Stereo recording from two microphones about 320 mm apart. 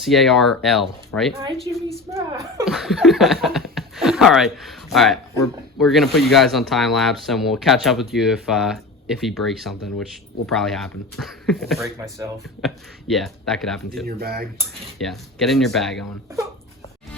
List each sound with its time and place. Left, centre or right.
0.0 s speech: centre
12.0 s speech: centre
12.6 s speech: centre
14.1 s speech: right
14.9 s speech: centre